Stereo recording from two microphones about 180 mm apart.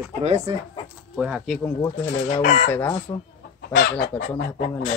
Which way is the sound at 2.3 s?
40° left (ahead or behind).